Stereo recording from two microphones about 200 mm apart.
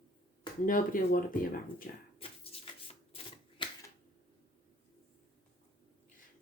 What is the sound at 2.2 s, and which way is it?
Shuffle, 30° left (ahead or behind).